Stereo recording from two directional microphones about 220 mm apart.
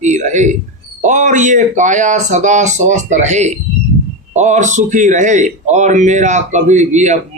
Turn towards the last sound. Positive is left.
turn(degrees=-30)  # may be behind; listen again after turning